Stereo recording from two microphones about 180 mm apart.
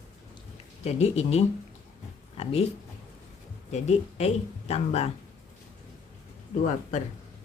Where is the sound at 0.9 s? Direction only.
35° left (ahead or behind).